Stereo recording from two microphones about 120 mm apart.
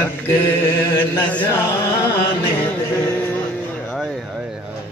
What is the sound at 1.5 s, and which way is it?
Speech, 25° left (ahead or behind).